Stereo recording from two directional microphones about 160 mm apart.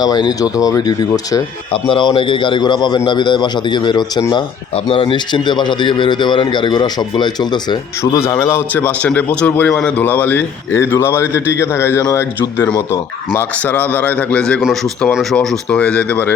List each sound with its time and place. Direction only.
0.0 s speech: 25° left (ahead or behind)
8.3 s a man's voice: 15° left (ahead or behind)